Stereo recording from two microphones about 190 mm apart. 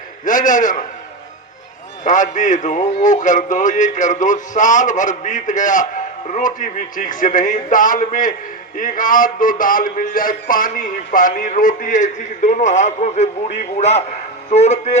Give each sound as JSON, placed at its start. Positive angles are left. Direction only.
{"t": 0.3, "sound": "a man's voice", "side_deg": 45}
{"t": 2.0, "sound": "a man's voice", "side_deg": 40}